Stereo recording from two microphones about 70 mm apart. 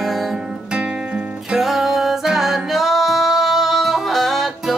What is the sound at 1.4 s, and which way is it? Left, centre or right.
Music, centre.